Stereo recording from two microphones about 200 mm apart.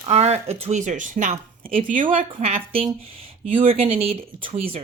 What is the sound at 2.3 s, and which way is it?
Speech, 30° right (ahead or behind).